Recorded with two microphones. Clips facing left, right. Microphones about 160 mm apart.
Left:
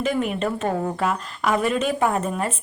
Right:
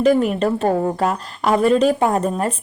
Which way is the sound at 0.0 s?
40° right (ahead or behind).